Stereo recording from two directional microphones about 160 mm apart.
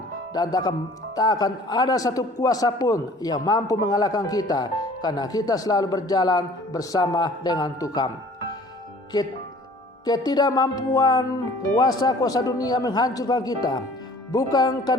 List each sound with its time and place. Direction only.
1.1 s a man's voice: 25° left (ahead or behind)
10.1 s a man's voice: 25° left (ahead or behind)